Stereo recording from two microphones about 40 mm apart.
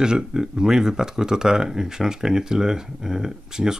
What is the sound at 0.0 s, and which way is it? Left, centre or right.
Speech, centre.